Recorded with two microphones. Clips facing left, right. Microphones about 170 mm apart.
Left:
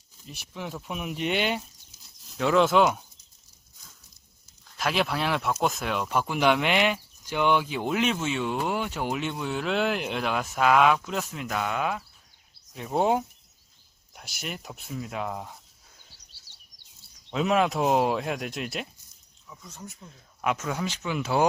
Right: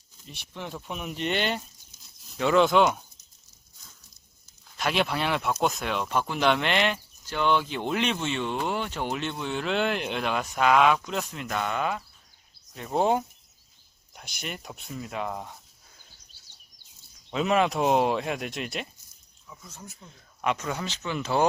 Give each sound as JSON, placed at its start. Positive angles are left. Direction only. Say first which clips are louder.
{"t": 0.2, "sound": "speech", "louder": "left 1 dB", "side_deg": 0}
{"t": 4.7, "sound": "speech", "louder": "even", "side_deg": 0}
{"t": 16.1, "sound": "bird vocalization", "louder": "even", "side_deg": 85}
{"t": 17.3, "sound": "speech", "louder": "even", "side_deg": 0}